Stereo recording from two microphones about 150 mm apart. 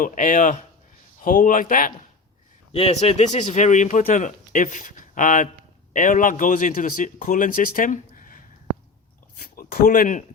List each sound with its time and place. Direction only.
0.0 s speech: 60° left (ahead or behind)
2.7 s speech: 40° left (ahead or behind); by 8.4 s 65° left (ahead or behind)
9.4 s speech: 80° left; by 10.2 s 60° left (ahead or behind)